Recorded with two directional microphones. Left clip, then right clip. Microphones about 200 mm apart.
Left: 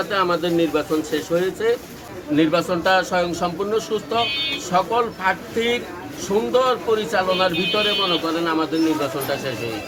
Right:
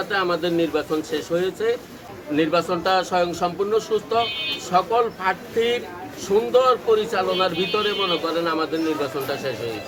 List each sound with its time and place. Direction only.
0.1 s speech: centre (ahead or behind)